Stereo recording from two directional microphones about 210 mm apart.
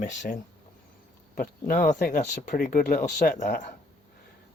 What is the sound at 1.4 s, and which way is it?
Speech, 40° left (ahead or behind).